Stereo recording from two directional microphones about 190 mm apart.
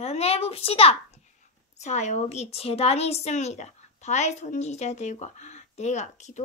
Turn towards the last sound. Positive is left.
turn(degrees=35)  # may be behind; listen again after turning